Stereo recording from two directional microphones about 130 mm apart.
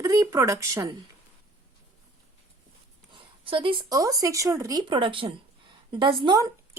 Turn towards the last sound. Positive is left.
turn(degrees=-30)  # may be behind; listen again after turning